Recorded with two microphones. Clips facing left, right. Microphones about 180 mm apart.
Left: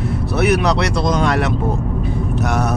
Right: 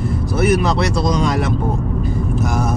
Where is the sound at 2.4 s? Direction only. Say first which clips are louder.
Left 2 dB; 70° left (ahead or behind).